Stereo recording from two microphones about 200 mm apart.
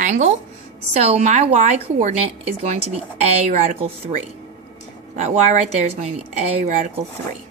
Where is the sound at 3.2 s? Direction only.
40° right (ahead or behind).